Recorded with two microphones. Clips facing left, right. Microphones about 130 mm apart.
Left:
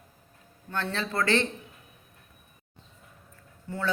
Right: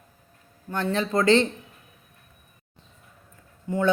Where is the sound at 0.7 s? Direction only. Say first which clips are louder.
Right 6 dB; 15° right (ahead or behind).